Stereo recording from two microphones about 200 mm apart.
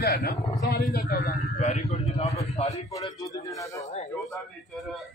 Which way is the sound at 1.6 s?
35° left (ahead or behind).